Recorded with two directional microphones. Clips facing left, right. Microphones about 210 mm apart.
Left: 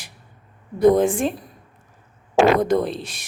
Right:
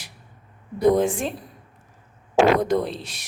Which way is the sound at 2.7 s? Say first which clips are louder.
Left 2 dB; 50° left (ahead or behind).